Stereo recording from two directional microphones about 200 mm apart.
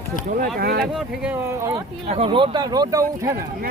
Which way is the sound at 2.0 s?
30° right (ahead or behind).